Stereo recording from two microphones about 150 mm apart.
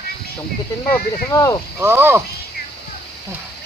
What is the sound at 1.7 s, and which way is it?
Speech, 15° right (ahead or behind).